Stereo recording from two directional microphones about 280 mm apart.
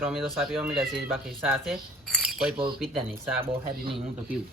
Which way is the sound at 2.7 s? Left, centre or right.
Centre.